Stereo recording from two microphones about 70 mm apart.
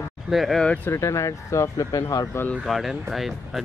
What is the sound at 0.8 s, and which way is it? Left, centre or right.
Speech, left.